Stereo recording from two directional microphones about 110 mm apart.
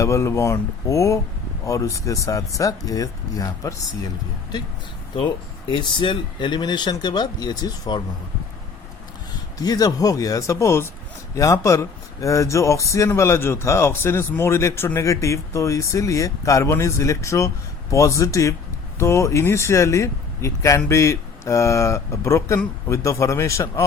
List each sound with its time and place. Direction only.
0.0 s speech: 25° left (ahead or behind)
5.9 s speech: 45° left (ahead or behind)
9.6 s speech: 35° left (ahead or behind)